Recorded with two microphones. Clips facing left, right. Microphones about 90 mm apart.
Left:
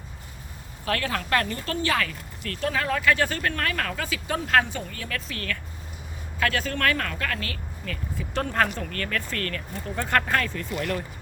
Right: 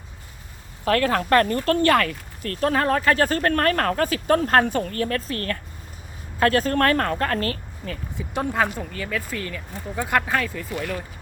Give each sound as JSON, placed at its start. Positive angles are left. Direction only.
{"t": 0.9, "sound": "speech", "side_deg": -40}
{"t": 8.2, "sound": "speech", "side_deg": -15}